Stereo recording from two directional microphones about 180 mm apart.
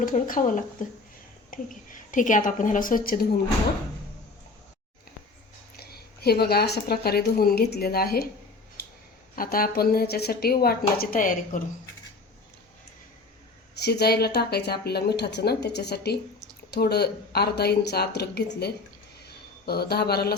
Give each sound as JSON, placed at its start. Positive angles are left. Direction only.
{"t": 0.0, "sound": "a woman's voice", "side_deg": 45}
{"t": 5.7, "sound": "a woman's voice", "side_deg": 60}
{"t": 9.3, "sound": "speech", "side_deg": 55}
{"t": 13.7, "sound": "speech", "side_deg": 65}
{"t": 19.2, "sound": "a sound", "side_deg": 60}